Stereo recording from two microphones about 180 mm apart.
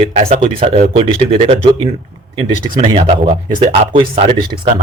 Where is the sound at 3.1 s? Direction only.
40° right (ahead or behind).